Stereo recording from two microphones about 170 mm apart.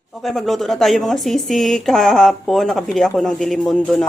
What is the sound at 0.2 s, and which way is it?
A woman's voice, centre (ahead or behind).